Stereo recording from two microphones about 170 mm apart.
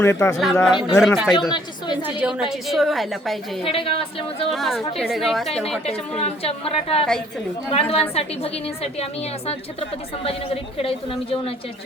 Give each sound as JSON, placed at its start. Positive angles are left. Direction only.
{"t": 0.0, "sound": "speech", "side_deg": 15}
{"t": 0.6, "sound": "a woman's voice", "side_deg": 0}
{"t": 1.5, "sound": "a woman's voice", "side_deg": 25}
{"t": 2.0, "sound": "a woman's voice", "side_deg": -5}
{"t": 3.6, "sound": "a woman's voice", "side_deg": 35}
{"t": 4.5, "sound": "a woman's voice", "side_deg": 0}
{"t": 5.8, "sound": "a woman's voice", "side_deg": 35}
{"t": 10.2, "sound": "a woman's voice", "side_deg": 35}